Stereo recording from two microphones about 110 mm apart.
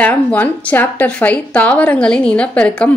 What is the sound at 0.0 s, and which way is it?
Speech, 15° left (ahead or behind).